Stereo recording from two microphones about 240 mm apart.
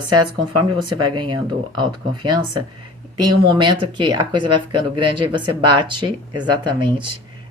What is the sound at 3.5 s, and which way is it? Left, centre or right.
Speech, centre.